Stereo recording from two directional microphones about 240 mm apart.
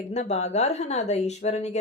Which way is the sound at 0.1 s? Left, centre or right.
Left.